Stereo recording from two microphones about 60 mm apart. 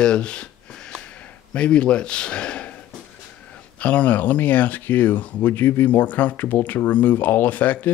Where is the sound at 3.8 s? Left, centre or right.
Left.